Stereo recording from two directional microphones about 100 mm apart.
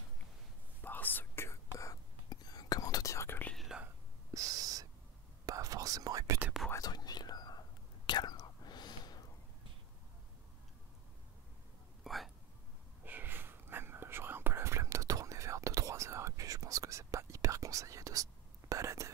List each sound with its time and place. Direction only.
0.8 s whispering: 20° left (ahead or behind)
2.2 s whispering: 40° left (ahead or behind); by 3.5 s 20° left (ahead or behind)
3.5 s whispering: 5° right (ahead or behind)
4.3 s owl: 35° right (ahead or behind)
5.4 s whispering: 35° right (ahead or behind)
6.8 s whispering: 40° left (ahead or behind)
12.0 s hiccup: centre (ahead or behind)
13.0 s whispering: 20° right (ahead or behind)